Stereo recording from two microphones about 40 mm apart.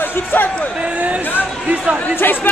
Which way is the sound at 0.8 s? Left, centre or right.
Right.